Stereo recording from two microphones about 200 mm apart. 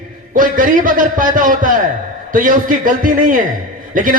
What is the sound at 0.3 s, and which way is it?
A man's voice, 40° right (ahead or behind).